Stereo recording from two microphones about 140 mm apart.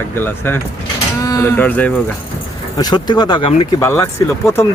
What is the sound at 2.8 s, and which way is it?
Speech, 30° left (ahead or behind).